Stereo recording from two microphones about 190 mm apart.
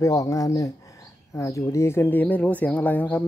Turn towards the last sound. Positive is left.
turn(degrees=10)  # may be behind; listen again after turning